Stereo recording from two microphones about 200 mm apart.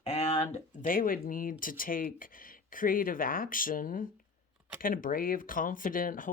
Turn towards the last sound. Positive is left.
turn(degrees=45)  # may be behind; listen again after turning